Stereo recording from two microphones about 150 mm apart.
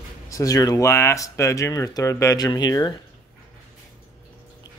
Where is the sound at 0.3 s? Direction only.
20° left (ahead or behind).